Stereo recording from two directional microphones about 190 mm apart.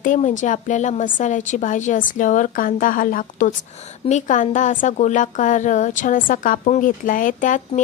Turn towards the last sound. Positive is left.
turn(degrees=40)  # may be behind; listen again after turning